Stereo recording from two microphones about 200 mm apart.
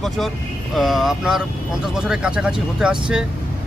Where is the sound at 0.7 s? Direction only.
Centre (ahead or behind).